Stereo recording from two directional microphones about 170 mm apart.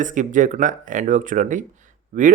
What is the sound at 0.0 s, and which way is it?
Speech, 50° right (ahead or behind).